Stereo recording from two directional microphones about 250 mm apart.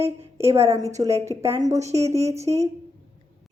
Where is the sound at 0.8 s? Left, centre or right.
Centre.